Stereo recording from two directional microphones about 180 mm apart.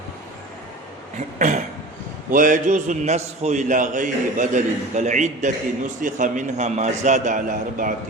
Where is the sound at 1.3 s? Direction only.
45° right (ahead or behind).